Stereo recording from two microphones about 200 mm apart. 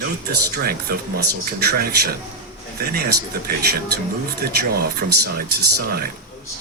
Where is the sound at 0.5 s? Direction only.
50° right (ahead or behind).